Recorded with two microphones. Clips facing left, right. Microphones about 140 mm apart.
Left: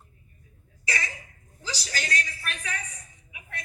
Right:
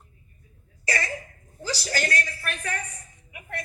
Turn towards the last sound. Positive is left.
turn(degrees=-50)  # may be behind; listen again after turning